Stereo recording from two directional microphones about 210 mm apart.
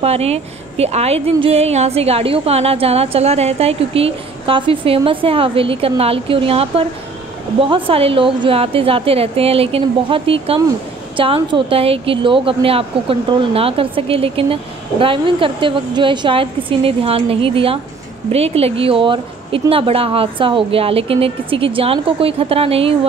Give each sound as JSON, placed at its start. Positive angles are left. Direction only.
{"t": 0.0, "sound": "a woman's voice", "side_deg": -30}